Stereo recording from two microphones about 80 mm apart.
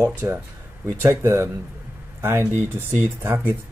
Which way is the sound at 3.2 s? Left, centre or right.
Right.